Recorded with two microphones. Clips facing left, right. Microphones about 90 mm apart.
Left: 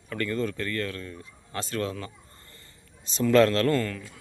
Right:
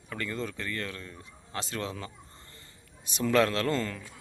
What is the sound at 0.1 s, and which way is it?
A man's voice, 15° right (ahead or behind).